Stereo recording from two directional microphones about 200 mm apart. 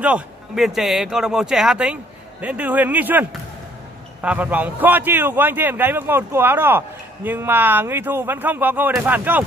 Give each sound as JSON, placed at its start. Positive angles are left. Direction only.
{"t": 0.0, "sound": "a man's voice", "side_deg": -5}